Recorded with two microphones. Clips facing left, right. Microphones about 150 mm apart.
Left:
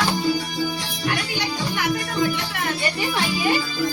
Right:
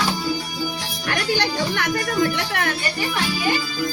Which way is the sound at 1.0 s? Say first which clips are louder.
Right 3 dB; 90° right.